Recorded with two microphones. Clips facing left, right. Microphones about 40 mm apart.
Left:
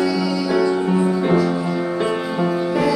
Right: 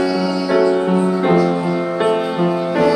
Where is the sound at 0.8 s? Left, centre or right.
Right.